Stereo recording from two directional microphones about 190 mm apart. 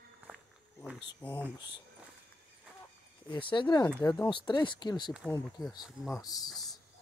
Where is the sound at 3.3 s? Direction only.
25° left (ahead or behind).